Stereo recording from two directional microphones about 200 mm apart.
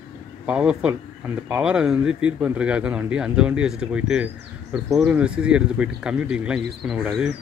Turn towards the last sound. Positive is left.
turn(degrees=0)  # may be behind; listen again after turning